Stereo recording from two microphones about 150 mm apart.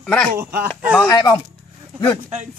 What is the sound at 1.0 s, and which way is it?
Speech, 25° left (ahead or behind).